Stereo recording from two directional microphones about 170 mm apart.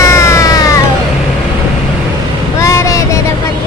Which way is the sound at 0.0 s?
15° left (ahead or behind).